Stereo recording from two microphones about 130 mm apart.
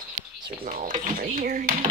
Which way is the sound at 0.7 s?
85° right.